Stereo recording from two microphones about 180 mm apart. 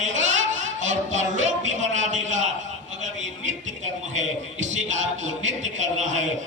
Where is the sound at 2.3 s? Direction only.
40° right (ahead or behind).